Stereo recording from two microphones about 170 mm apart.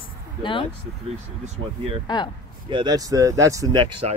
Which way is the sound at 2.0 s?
30° left (ahead or behind).